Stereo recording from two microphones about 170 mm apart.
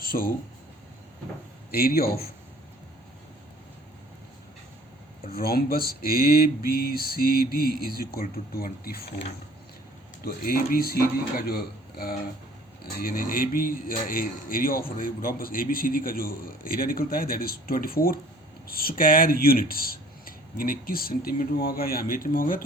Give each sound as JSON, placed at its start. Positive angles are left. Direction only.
{"t": 0.0, "sound": "speech", "side_deg": 55}
{"t": 1.7, "sound": "speech", "side_deg": 60}
{"t": 5.2, "sound": "speech", "side_deg": 60}
{"t": 10.2, "sound": "speech", "side_deg": 60}